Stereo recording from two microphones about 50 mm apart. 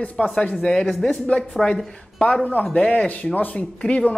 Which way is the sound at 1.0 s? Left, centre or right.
Left.